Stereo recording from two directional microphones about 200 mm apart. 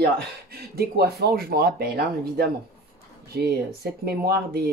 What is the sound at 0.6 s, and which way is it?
Speech, 50° right (ahead or behind).